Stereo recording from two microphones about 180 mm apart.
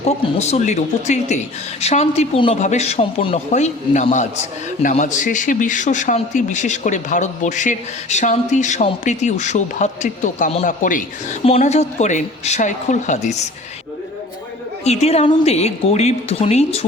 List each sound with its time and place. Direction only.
0.0 s a man's voice: 35° left (ahead or behind)
14.8 s speech: 35° left (ahead or behind)